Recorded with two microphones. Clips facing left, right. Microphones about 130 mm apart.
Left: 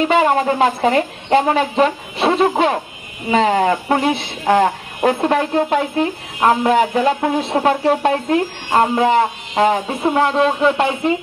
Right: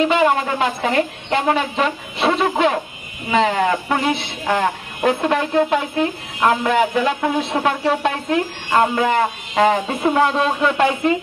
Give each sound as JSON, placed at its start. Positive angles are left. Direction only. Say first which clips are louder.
{"t": 0.2, "sound": "speech", "louder": "left 3 dB", "side_deg": 35}
{"t": 9.6, "sound": "speech", "louder": "even", "side_deg": 15}